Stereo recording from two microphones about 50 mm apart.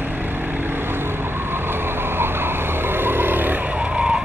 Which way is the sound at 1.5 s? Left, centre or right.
Right.